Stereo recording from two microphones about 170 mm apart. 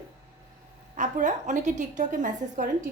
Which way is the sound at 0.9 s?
45° right (ahead or behind).